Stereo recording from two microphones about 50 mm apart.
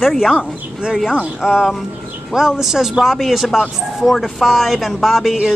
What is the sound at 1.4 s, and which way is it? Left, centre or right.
Speech, centre.